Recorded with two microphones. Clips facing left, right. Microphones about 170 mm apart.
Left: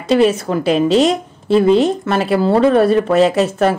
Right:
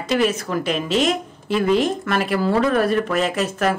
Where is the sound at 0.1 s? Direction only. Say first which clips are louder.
Left 7 dB; 30° left (ahead or behind).